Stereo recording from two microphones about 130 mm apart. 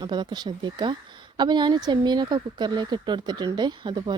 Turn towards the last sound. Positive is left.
turn(degrees=-35)  # may be behind; listen again after turning